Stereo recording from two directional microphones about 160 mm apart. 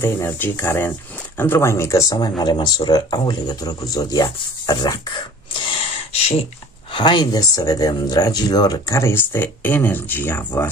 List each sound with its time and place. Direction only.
0.0 s speech: 15° left (ahead or behind)